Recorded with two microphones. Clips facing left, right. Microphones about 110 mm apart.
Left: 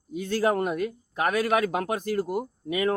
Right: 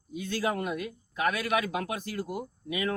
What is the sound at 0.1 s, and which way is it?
Speech, 45° left (ahead or behind).